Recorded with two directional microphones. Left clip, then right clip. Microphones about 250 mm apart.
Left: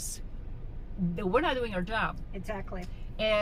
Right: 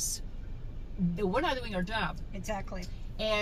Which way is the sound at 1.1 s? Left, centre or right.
Centre.